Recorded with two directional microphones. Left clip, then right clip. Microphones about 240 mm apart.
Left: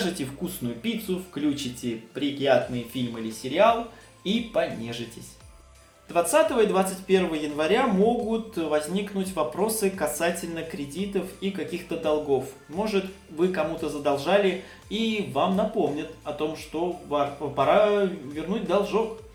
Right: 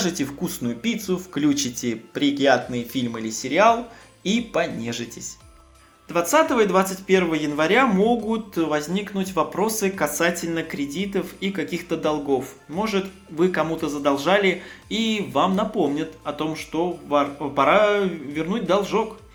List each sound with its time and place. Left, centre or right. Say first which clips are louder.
0.0 s speech: right 4 dB; right
6.1 s speech: right 2 dB; right